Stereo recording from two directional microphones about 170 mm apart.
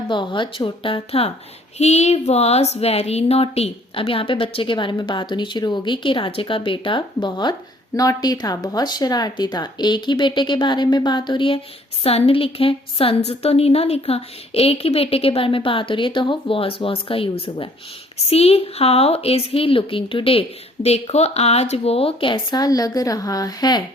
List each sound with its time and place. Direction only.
0.1 s speech: 30° left (ahead or behind)